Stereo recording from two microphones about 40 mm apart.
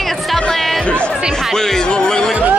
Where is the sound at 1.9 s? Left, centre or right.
Centre.